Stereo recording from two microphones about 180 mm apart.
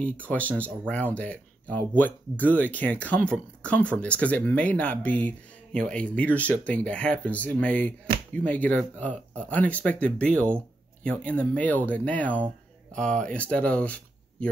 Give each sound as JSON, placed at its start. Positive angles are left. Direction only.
{"t": 0.0, "sound": "speech", "side_deg": 10}
{"t": 13.1, "sound": "speech", "side_deg": -45}
{"t": 13.4, "sound": "speech", "side_deg": 5}